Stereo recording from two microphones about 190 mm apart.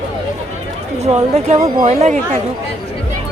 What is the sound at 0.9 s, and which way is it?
Speech, 35° right (ahead or behind).